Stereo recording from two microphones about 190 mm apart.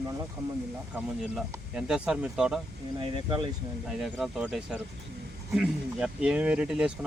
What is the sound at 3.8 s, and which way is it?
Speech, centre (ahead or behind).